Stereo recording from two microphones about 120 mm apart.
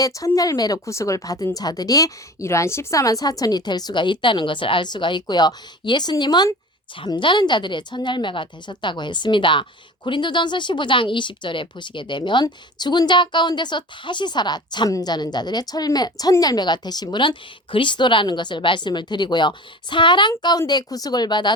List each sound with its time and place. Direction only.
0.0 s a woman's voice: 30° left (ahead or behind)